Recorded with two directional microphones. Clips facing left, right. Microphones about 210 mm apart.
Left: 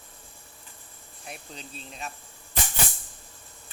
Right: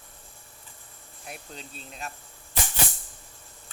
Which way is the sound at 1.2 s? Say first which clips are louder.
Even; centre (ahead or behind).